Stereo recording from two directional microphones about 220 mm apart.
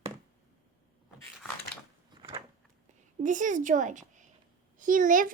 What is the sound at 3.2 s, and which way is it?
A woman's voice, 35° right (ahead or behind).